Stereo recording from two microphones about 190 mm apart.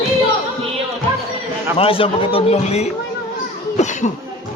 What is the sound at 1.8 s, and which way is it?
Speech, 30° left (ahead or behind).